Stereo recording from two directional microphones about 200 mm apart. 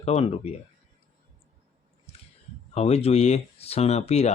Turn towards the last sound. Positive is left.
turn(degrees=30)  # may be behind; listen again after turning